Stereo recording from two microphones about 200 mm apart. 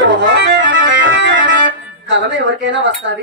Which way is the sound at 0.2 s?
60° right (ahead or behind).